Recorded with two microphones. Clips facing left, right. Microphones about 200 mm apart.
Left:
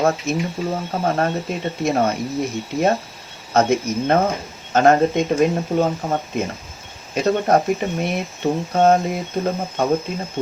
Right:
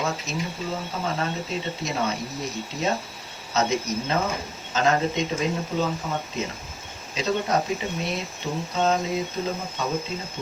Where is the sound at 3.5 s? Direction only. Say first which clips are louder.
Left 7 dB; 55° left (ahead or behind).